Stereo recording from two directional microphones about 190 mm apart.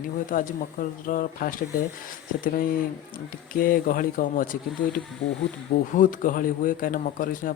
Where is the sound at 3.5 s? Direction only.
50° left (ahead or behind).